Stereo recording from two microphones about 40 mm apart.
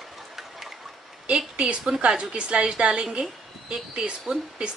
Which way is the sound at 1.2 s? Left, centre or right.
Right.